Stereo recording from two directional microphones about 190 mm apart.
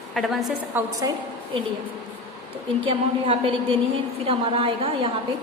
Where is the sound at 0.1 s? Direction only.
Centre (ahead or behind).